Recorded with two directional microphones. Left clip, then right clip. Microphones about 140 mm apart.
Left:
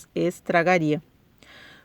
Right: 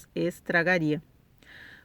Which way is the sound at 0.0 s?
35° left (ahead or behind).